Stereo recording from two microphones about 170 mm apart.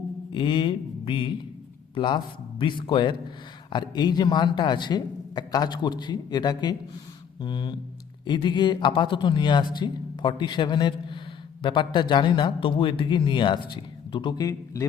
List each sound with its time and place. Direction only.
0.3 s speech: 30° left (ahead or behind)